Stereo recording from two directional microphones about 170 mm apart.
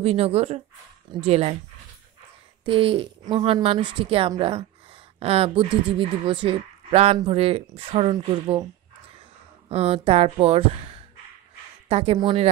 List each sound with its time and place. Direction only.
0.0 s a woman's voice: 35° right (ahead or behind)
2.6 s a woman's voice: 30° right (ahead or behind)
9.7 s a woman's voice: 35° right (ahead or behind)
11.9 s a woman's voice: 35° right (ahead or behind)